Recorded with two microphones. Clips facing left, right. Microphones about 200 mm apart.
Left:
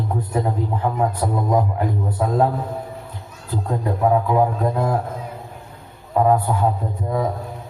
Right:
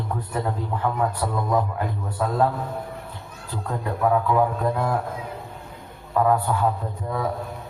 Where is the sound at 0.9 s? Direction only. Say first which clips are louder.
Left 3 dB; 20° left (ahead or behind).